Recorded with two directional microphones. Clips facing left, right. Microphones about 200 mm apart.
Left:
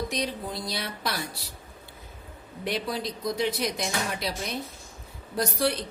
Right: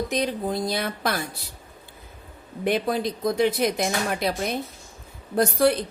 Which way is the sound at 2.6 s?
55° right (ahead or behind).